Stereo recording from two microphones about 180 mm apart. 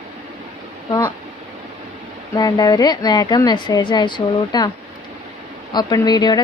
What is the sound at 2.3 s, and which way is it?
A woman's voice, 20° left (ahead or behind).